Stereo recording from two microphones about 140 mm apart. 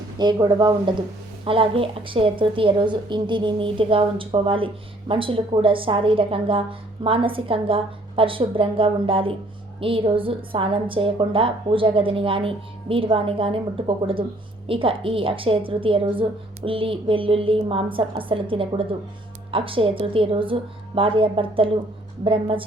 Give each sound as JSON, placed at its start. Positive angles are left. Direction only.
{"t": 0.2, "sound": "speech", "side_deg": -30}
{"t": 1.5, "sound": "a woman's voice", "side_deg": -40}